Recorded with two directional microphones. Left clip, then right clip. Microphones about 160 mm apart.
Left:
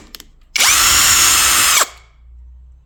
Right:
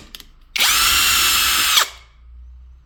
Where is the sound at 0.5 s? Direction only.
90° left.